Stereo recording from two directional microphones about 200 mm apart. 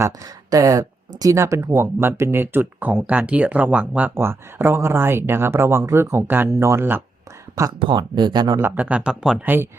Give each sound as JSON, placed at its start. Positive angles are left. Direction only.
{"t": 0.0, "sound": "speech", "side_deg": -15}